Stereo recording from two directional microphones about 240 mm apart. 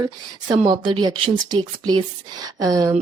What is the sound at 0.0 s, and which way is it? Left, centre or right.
A woman's voice, centre.